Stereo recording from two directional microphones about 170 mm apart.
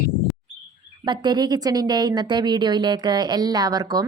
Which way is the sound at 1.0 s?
25° right (ahead or behind).